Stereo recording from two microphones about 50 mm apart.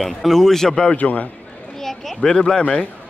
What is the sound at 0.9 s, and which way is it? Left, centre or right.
Speech, left.